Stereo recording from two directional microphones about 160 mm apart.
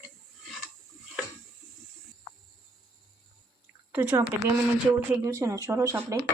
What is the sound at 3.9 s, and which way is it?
Speech, 10° right (ahead or behind).